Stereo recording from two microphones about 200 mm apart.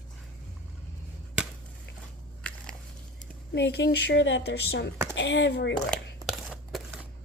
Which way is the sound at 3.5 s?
55° left (ahead or behind).